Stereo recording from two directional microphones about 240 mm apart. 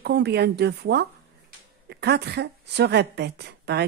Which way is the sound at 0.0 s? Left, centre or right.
Right.